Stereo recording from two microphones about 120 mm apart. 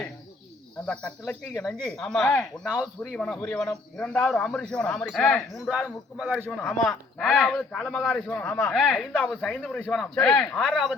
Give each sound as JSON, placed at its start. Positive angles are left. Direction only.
{"t": 1.6, "sound": "speech", "side_deg": 0}
{"t": 2.6, "sound": "speech", "side_deg": -5}
{"t": 3.2, "sound": "speech", "side_deg": 5}
{"t": 8.4, "sound": "speech", "side_deg": 20}
{"t": 8.7, "sound": "speech", "side_deg": 5}